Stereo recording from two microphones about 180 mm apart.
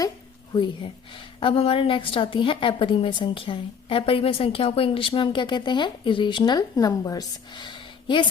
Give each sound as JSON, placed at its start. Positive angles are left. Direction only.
{"t": 1.4, "sound": "a woman's voice", "side_deg": 30}